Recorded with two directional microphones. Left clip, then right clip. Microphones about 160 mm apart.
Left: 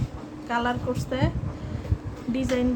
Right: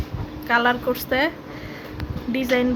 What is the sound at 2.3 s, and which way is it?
Speech, centre (ahead or behind).